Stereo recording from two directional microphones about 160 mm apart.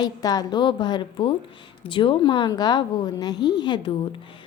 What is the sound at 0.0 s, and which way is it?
A woman's voice, 25° left (ahead or behind).